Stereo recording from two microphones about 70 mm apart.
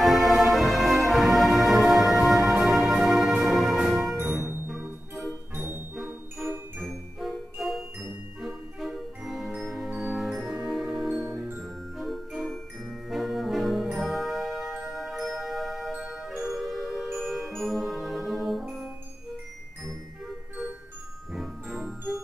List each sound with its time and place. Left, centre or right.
0.0 s music: centre
5.5 s music: right
6.9 s music: centre
9.8 s music: right
10.1 s music: centre
17.5 s music: centre
21.3 s music: centre